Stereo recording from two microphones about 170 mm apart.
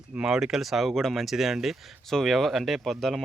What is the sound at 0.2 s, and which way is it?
Speech, 5° right (ahead or behind).